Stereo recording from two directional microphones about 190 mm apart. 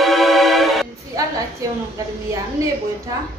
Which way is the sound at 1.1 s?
20° right (ahead or behind).